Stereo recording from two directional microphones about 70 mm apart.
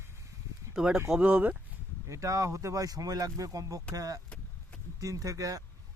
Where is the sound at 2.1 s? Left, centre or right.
Right.